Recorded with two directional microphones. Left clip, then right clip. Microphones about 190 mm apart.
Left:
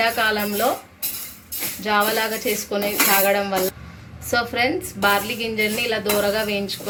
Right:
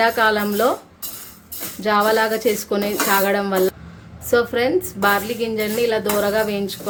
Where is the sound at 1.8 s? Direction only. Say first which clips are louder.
Right 3 dB; 55° right (ahead or behind).